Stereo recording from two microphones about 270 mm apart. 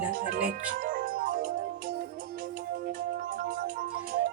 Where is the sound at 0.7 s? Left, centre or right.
Right.